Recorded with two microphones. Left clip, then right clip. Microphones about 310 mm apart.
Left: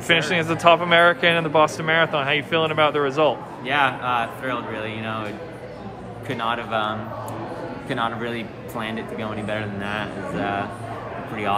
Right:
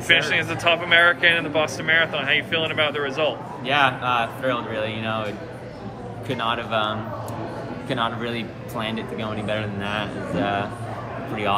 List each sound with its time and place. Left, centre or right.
0.1 s speech: centre
3.6 s a man's voice: centre